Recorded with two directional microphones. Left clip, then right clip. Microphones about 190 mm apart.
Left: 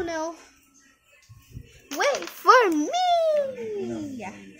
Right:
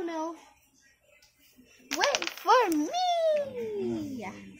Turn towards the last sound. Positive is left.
turn(degrees=15)  # may be behind; listen again after turning